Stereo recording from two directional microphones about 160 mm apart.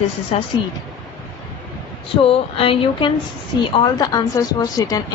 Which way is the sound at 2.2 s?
35° left (ahead or behind).